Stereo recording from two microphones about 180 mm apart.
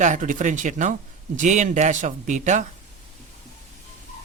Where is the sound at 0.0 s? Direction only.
45° right (ahead or behind).